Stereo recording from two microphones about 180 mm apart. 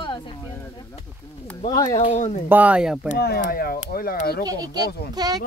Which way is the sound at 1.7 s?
20° left (ahead or behind).